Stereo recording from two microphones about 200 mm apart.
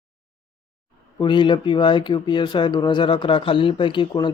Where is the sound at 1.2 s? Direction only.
20° left (ahead or behind).